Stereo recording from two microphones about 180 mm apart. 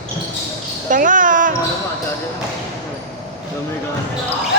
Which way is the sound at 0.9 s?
45° right (ahead or behind).